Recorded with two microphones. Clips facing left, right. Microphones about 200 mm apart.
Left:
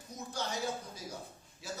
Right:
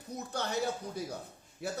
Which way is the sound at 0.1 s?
60° right (ahead or behind).